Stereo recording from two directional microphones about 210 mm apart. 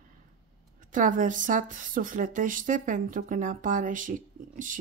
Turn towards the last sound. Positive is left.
turn(degrees=-40)  # may be behind; listen again after turning